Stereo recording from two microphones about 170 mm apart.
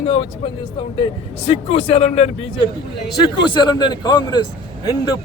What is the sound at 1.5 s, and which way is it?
Speech, 35° left (ahead or behind).